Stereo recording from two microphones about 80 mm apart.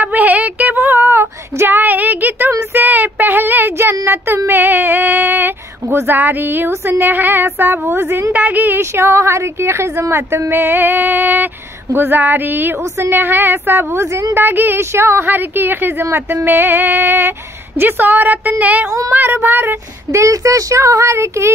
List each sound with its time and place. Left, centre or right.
0.0 s child singing: right
2.7 s a sound: right
4.0 s speech: right
18.9 s speech: right
19.1 s speech: right